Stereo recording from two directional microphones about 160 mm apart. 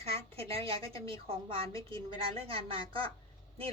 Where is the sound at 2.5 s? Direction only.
35° right (ahead or behind).